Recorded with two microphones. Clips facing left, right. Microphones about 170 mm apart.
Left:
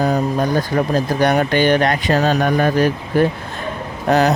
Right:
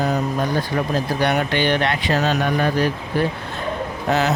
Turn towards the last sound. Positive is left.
turn(degrees=40)  # may be behind; listen again after turning